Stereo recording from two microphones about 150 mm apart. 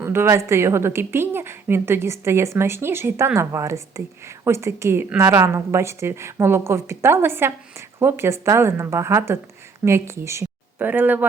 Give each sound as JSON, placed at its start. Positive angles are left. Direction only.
{"t": 0.0, "sound": "a woman's voice", "side_deg": -15}